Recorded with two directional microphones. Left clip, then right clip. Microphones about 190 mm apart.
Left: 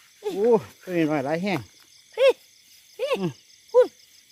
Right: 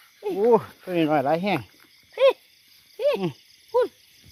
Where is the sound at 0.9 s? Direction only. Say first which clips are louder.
Right 3 dB; 5° left (ahead or behind).